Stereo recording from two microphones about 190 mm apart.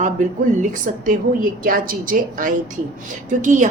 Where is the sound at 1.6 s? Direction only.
45° right (ahead or behind).